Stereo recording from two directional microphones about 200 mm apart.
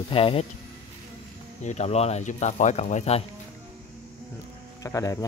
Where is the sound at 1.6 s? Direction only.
35° left (ahead or behind).